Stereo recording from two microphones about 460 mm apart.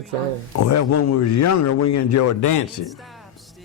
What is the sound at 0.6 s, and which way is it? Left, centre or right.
A man's voice, left.